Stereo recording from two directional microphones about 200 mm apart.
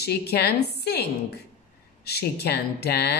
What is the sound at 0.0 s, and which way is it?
Speech, 55° left (ahead or behind).